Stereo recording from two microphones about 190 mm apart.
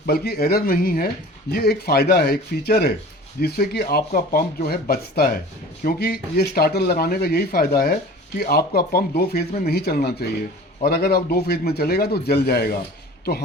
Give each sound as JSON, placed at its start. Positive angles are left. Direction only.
{"t": 0.0, "sound": "speech", "side_deg": 55}